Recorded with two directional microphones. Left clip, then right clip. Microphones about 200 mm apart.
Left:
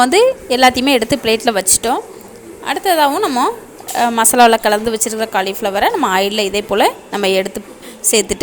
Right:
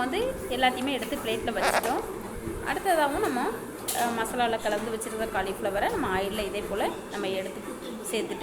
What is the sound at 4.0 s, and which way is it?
A woman's voice, 60° left (ahead or behind).